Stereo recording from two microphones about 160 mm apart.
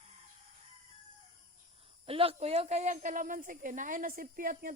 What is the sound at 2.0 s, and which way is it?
A woman's voice, 35° right (ahead or behind).